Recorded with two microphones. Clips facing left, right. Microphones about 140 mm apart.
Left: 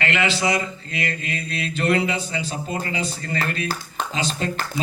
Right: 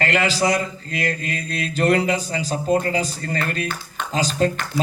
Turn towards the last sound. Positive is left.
turn(degrees=20)  # may be behind; listen again after turning